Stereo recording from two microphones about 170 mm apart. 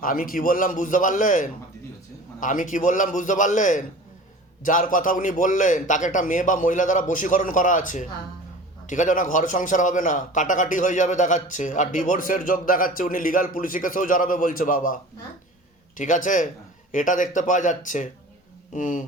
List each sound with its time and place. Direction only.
0.0 s a man's voice: 55° left (ahead or behind)
16.0 s a man's voice: 50° left (ahead or behind)